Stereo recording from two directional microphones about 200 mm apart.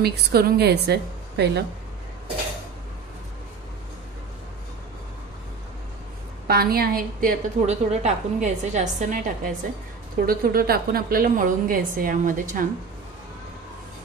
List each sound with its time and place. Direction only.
0.0 s a woman's voice: 50° right (ahead or behind)
6.4 s a woman's voice: 50° right (ahead or behind)